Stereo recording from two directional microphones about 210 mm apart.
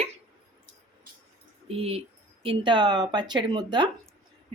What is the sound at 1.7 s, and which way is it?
Speech, 30° right (ahead or behind).